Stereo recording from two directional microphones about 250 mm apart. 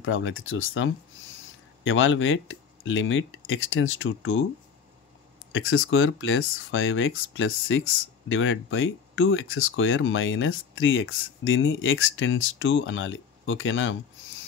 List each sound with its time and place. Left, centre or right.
0.0 s speech: left
5.5 s speech: left